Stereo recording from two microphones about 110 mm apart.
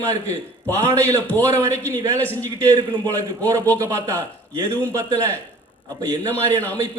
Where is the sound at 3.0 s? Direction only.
35° right (ahead or behind).